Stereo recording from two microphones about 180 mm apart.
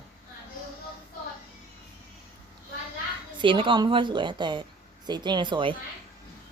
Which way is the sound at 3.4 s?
30° right (ahead or behind).